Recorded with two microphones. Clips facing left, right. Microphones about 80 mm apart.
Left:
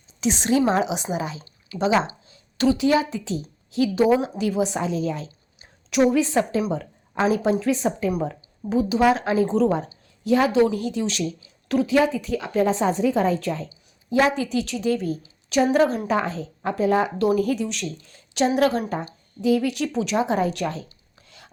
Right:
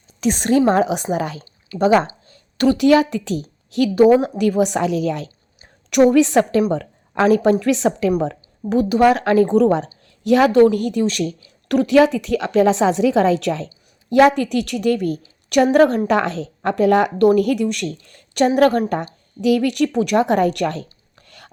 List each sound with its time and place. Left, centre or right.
0.2 s a woman's voice: right
3.9 s a woman's voice: right
6.6 s speech: right
8.2 s speech: right
11.7 s a woman's voice: right
14.1 s speech: right
16.0 s speech: right